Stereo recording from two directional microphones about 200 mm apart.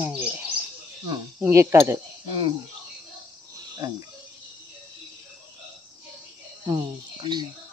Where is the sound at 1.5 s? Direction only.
15° right (ahead or behind).